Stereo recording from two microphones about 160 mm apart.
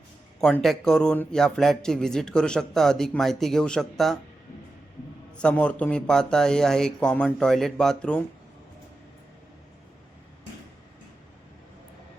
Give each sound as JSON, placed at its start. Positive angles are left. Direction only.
{"t": 0.3, "sound": "a man's voice", "side_deg": 5}
{"t": 5.4, "sound": "a man's voice", "side_deg": 5}